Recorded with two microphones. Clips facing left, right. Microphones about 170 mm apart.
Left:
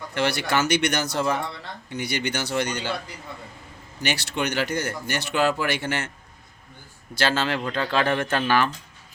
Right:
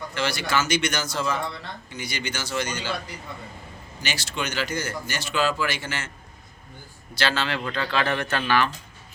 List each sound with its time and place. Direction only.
0.1 s speech: 60° left (ahead or behind)
4.0 s speech: 60° left (ahead or behind)
7.1 s speech: 45° left (ahead or behind)